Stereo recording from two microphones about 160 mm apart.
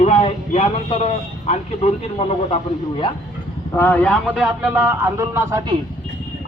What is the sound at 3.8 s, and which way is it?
Speech, 10° left (ahead or behind).